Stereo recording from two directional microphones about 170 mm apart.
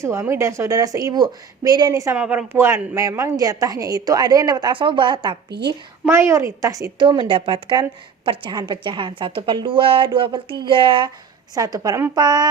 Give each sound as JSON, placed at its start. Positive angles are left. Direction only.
{"t": 0.0, "sound": "a woman's voice", "side_deg": -15}
{"t": 2.1, "sound": "a woman's voice", "side_deg": -10}
{"t": 6.1, "sound": "a woman's voice", "side_deg": -15}